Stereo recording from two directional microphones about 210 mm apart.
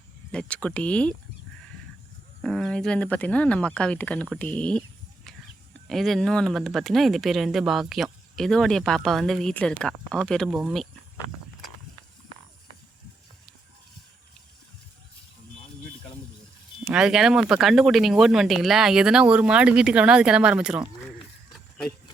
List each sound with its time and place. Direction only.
0.3 s speech: 5° left (ahead or behind)
2.4 s speech: centre (ahead or behind)
5.9 s speech: centre (ahead or behind)
16.8 s speech: 5° right (ahead or behind)